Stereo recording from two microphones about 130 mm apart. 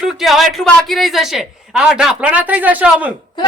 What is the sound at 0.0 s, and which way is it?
A woman's voice, centre (ahead or behind).